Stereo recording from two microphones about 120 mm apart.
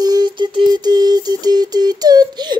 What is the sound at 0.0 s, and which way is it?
Synthetic singing, 35° right (ahead or behind).